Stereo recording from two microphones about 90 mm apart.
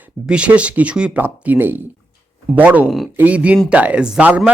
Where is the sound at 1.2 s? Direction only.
25° right (ahead or behind).